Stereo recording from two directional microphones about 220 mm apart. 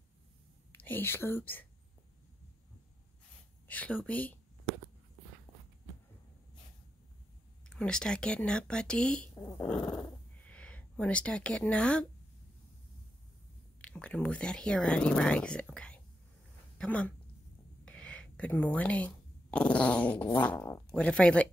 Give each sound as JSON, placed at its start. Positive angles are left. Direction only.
{"t": 0.7, "sound": "speech", "side_deg": 10}
{"t": 3.6, "sound": "speech", "side_deg": 5}
{"t": 5.5, "sound": "walk", "side_deg": 10}
{"t": 7.6, "sound": "speech", "side_deg": 5}
{"t": 13.7, "sound": "speech", "side_deg": 5}